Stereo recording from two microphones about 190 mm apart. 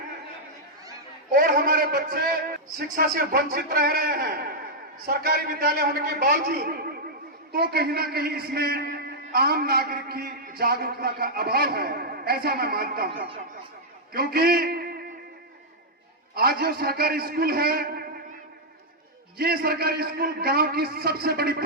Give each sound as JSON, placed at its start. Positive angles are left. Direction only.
{"t": 1.3, "sound": "a man's voice", "side_deg": -50}
{"t": 16.3, "sound": "a man's voice", "side_deg": -55}
{"t": 19.4, "sound": "a man's voice", "side_deg": -55}